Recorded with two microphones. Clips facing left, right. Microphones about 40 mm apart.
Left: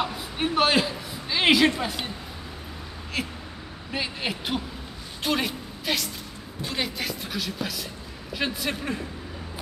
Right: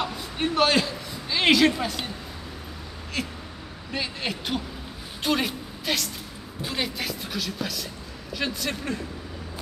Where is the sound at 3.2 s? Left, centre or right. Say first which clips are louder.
Even; centre.